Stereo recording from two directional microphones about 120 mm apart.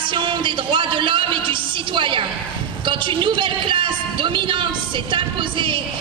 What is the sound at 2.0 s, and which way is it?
A woman's voice, 45° right (ahead or behind).